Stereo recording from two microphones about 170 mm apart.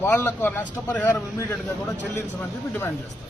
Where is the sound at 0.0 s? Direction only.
10° left (ahead or behind).